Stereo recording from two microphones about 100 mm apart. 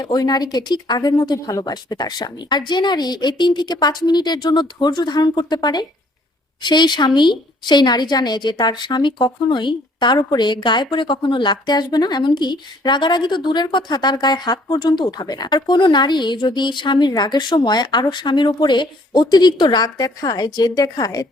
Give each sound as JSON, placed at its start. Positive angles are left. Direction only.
{"t": 0.0, "sound": "a woman's voice", "side_deg": 45}